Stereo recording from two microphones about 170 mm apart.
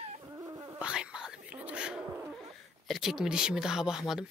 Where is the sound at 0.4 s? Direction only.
20° right (ahead or behind).